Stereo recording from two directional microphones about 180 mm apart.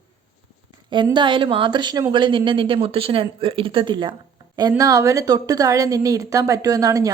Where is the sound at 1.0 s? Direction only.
25° right (ahead or behind).